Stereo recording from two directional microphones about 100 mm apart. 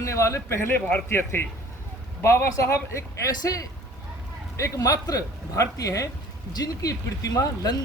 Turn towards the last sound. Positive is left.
turn(degrees=40)  # may be behind; listen again after turning